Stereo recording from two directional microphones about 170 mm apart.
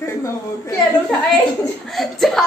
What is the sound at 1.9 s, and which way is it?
Speech, centre (ahead or behind).